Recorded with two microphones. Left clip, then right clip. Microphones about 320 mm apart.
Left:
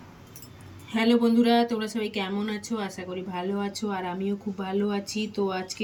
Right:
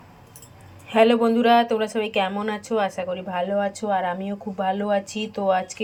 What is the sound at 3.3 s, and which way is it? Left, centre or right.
Speech, right.